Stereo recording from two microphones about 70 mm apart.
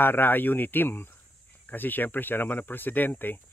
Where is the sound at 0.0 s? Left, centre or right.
Left.